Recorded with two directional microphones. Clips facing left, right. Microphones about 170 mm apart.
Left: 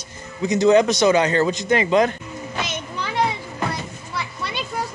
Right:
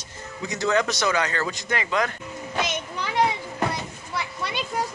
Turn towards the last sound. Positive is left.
turn(degrees=-15)  # may be behind; listen again after turning